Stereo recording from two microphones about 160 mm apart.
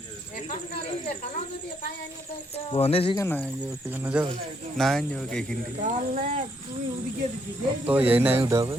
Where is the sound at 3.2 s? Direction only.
15° left (ahead or behind).